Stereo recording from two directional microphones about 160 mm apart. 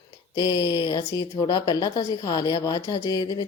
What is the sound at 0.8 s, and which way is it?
Speech, 25° left (ahead or behind).